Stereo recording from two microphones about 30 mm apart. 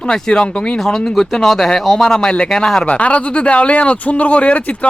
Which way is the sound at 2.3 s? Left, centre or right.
Left.